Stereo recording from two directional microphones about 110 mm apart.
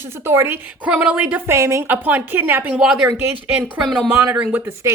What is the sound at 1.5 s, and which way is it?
A woman's voice, 25° right (ahead or behind).